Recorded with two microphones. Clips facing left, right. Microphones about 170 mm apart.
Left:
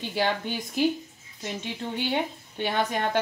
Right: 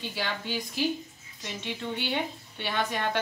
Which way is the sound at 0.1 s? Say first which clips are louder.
Left 7 dB; 55° left (ahead or behind).